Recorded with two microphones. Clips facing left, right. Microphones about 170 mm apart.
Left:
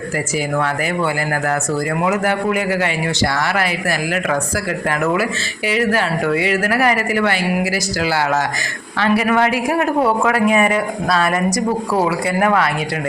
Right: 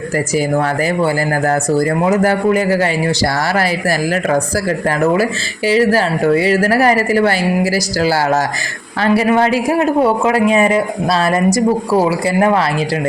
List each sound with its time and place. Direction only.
0.3 s a man's voice: 35° right (ahead or behind)